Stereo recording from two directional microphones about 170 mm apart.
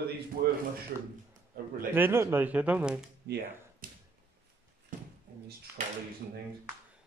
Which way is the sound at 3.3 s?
70° right (ahead or behind).